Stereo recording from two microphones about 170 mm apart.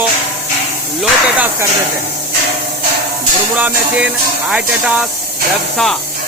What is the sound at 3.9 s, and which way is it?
Speech, 5° right (ahead or behind).